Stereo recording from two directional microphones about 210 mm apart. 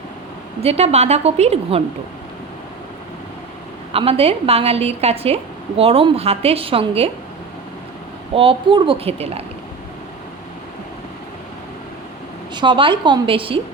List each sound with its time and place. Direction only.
0.6 s a woman's voice: 30° right (ahead or behind)
3.9 s a woman's voice: 30° right (ahead or behind)
8.4 s a woman's voice: 25° right (ahead or behind)
12.5 s a woman's voice: 25° right (ahead or behind)